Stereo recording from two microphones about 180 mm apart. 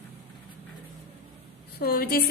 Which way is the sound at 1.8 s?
55° left (ahead or behind).